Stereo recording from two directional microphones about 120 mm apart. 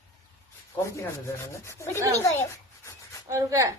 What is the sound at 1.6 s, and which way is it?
Speech, 25° left (ahead or behind).